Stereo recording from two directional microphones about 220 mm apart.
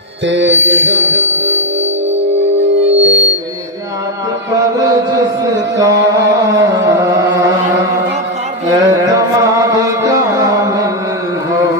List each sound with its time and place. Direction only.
0.3 s music: 55° right (ahead or behind)
2.6 s music: 55° right (ahead or behind)
5.4 s a sound: 15° right (ahead or behind)
6.7 s music: 15° right (ahead or behind)
8.7 s music: 15° right (ahead or behind)